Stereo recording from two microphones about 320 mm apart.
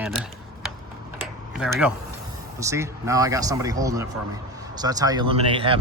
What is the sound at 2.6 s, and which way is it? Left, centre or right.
Speech, centre.